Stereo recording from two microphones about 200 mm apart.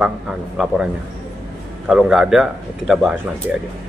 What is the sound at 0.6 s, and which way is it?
Speech, centre (ahead or behind).